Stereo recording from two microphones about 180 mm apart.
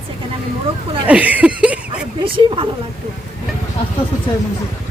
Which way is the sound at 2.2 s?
30° right (ahead or behind).